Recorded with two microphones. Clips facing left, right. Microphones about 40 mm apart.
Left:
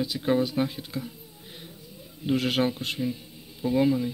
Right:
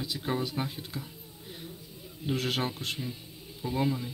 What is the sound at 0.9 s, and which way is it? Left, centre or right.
Speech, left.